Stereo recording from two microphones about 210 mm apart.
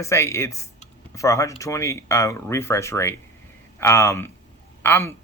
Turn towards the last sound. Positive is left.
turn(degrees=10)  # may be behind; listen again after turning